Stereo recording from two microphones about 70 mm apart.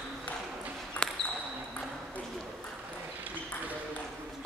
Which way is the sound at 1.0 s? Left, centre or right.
Centre.